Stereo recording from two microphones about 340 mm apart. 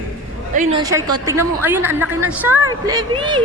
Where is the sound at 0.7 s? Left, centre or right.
Centre.